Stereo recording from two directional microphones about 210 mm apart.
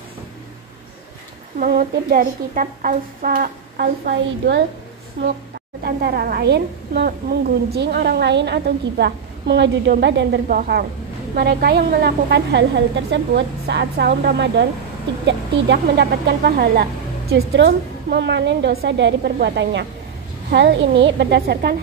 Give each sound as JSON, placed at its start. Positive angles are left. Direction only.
{"t": 1.6, "sound": "a woman's voice", "side_deg": -45}
{"t": 5.9, "sound": "a woman's voice", "side_deg": -45}